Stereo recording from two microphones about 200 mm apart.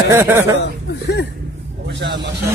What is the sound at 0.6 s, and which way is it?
Speech, 60° left (ahead or behind).